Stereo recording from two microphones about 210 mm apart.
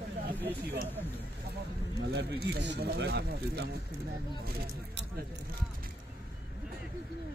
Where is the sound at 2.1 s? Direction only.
50° right (ahead or behind).